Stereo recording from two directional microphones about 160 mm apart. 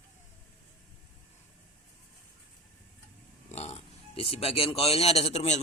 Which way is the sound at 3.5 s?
40° left (ahead or behind).